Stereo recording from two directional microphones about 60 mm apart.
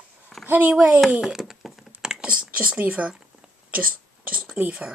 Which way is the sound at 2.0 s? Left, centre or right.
Centre.